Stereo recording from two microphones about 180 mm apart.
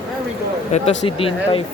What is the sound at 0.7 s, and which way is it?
Speech, 40° left (ahead or behind).